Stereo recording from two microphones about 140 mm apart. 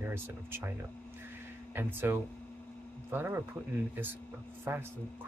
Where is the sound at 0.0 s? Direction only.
15° right (ahead or behind).